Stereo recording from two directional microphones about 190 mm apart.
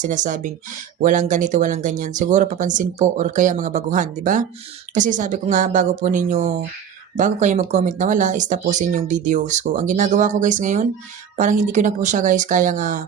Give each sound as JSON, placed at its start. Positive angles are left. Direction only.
{"t": 0.0, "sound": "speech", "side_deg": -40}